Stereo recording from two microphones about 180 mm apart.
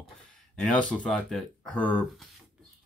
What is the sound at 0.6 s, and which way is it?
Speech, 5° left (ahead or behind).